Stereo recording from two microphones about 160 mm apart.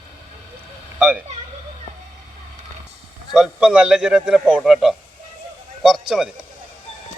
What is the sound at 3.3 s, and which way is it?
A man's voice, 5° right (ahead or behind).